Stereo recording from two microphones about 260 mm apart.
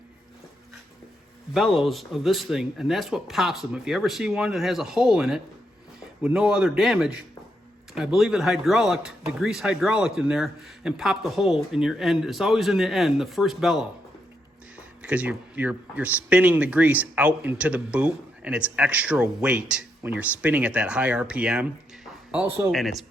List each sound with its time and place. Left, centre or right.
1.5 s speech: centre
15.0 s speech: centre